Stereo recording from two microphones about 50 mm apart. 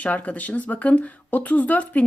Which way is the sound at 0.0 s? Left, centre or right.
Left.